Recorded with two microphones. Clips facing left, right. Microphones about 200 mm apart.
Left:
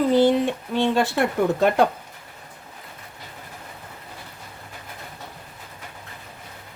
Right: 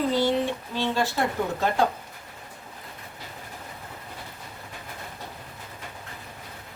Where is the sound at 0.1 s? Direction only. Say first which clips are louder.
Left 6 dB; 55° left (ahead or behind).